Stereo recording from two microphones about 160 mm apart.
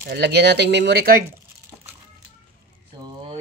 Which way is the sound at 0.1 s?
90° right.